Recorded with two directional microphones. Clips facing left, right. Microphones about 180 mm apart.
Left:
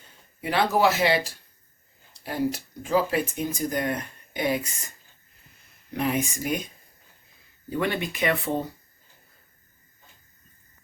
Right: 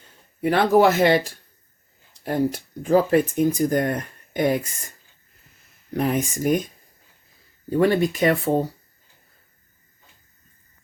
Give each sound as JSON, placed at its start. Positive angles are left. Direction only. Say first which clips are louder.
{"t": 0.4, "sound": "speech", "louder": "right 6 dB", "side_deg": -50}
{"t": 5.9, "sound": "speech", "louder": "right 3 dB", "side_deg": -45}
{"t": 7.7, "sound": "speech", "louder": "right 9 dB", "side_deg": -40}